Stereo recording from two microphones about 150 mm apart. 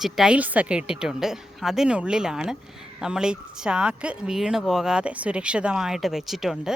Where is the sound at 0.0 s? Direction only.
5° right (ahead or behind).